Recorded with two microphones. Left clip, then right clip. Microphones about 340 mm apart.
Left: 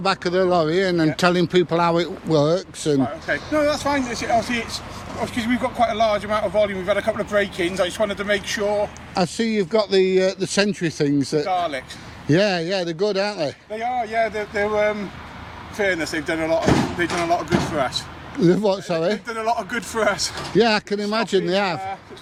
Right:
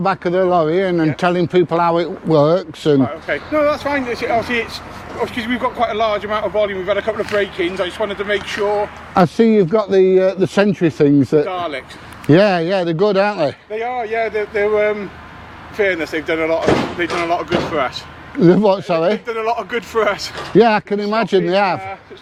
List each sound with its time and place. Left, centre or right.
0.0 s speech: centre
3.2 s speech: left
9.1 s speech: right
11.4 s speech: left
12.3 s speech: right
13.7 s speech: left
18.3 s speech: right
19.3 s speech: left
20.6 s speech: centre